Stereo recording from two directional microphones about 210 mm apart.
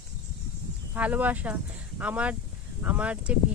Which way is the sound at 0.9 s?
10° right (ahead or behind).